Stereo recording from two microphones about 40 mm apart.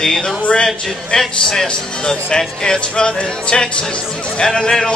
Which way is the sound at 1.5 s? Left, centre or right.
Centre.